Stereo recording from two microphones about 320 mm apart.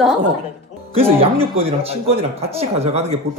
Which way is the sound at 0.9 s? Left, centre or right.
Centre.